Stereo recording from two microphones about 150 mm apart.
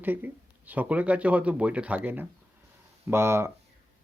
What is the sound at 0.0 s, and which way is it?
Speech, 10° right (ahead or behind).